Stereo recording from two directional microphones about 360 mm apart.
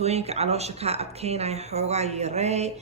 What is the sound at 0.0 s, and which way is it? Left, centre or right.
Speech, centre.